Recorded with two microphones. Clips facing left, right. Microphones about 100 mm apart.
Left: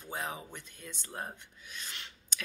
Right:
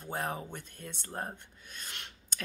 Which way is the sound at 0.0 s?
50° right (ahead or behind).